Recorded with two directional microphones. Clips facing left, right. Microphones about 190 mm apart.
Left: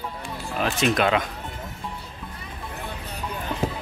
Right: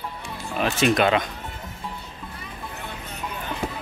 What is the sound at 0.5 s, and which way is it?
Speech, centre (ahead or behind).